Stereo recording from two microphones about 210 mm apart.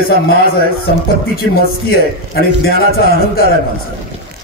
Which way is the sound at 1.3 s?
45° left (ahead or behind).